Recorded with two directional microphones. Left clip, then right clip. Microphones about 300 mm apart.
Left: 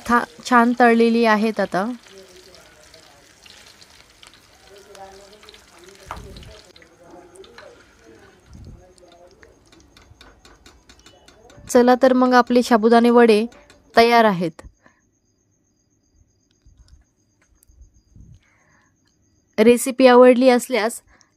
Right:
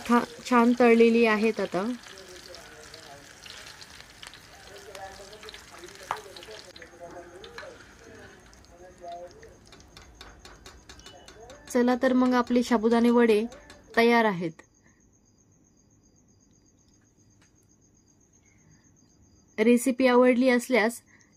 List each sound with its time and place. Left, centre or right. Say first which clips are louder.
0.4 s speech: left 7 dB; left
1.9 s water: left 3 dB; centre
11.7 s speech: left 10 dB; left
13.5 s a sound: even; centre
13.9 s speech: left 8 dB; left
19.5 s speech: left 8 dB; left